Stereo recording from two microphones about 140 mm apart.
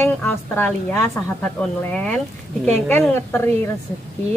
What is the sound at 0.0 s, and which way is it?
Speech, 15° left (ahead or behind).